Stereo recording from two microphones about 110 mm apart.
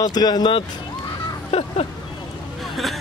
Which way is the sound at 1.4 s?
65° left (ahead or behind).